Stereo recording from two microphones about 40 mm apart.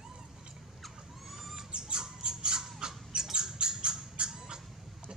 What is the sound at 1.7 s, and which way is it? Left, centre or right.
Squawk, centre.